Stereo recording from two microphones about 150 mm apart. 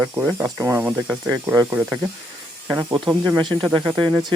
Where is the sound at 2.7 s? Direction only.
15° right (ahead or behind).